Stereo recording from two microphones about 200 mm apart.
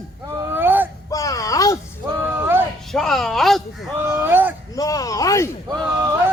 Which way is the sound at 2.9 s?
Centre (ahead or behind).